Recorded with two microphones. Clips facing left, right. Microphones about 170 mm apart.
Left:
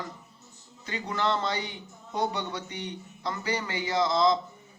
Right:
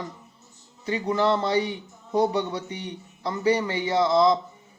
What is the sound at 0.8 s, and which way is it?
Speech, 30° right (ahead or behind).